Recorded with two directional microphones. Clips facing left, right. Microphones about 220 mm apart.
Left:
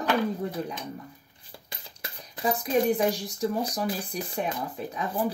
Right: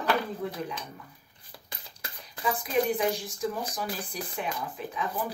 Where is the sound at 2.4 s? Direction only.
35° left (ahead or behind).